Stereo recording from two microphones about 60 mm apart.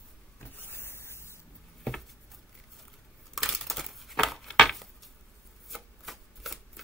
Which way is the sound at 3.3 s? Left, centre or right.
Centre.